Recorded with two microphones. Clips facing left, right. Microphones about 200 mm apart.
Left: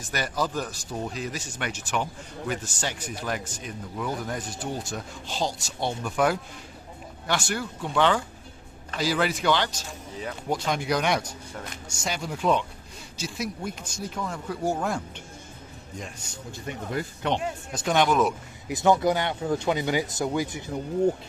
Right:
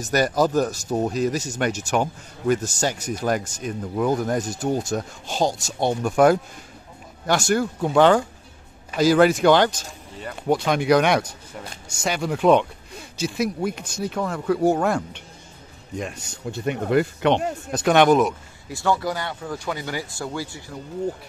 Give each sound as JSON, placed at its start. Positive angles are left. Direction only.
{"t": 0.0, "sound": "speech", "side_deg": -40}
{"t": 10.5, "sound": "speech", "side_deg": -65}
{"t": 16.5, "sound": "speech", "side_deg": -65}
{"t": 18.7, "sound": "speech", "side_deg": 20}